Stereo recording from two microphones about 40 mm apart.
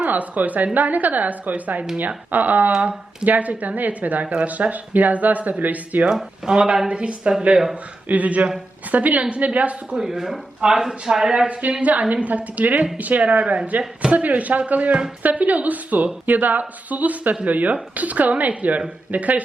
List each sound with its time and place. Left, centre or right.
0.0 s speech: right
6.1 s speech: centre
8.0 s speech: right
9.9 s speech: centre; by 13.4 s right
13.4 s speech: right
14.1 s speech: right